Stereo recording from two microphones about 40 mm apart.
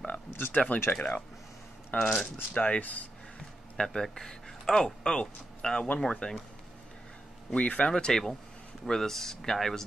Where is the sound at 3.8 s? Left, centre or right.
Centre.